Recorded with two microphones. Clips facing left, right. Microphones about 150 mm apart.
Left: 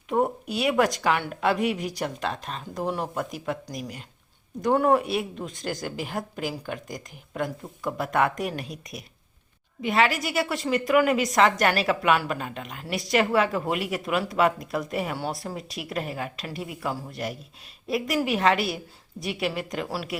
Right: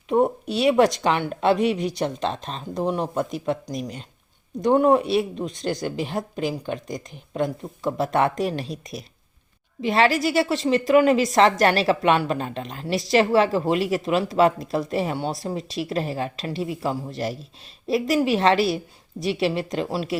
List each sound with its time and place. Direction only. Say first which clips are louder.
0.1 s a woman's voice: right 4 dB; 25° right (ahead or behind)